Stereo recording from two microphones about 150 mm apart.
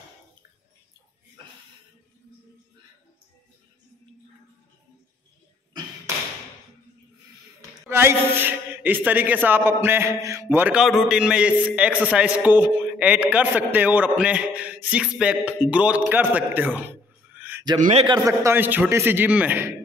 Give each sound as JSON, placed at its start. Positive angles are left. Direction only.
{"t": 7.9, "sound": "a man's voice", "side_deg": -15}
{"t": 17.4, "sound": "a sound", "side_deg": -15}
{"t": 17.7, "sound": "a man's voice", "side_deg": -55}
{"t": 18.0, "sound": "a man's voice", "side_deg": -25}